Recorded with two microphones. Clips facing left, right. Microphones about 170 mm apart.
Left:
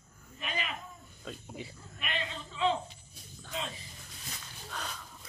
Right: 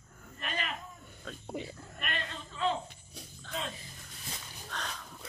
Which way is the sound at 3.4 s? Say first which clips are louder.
Even; 5° left (ahead or behind).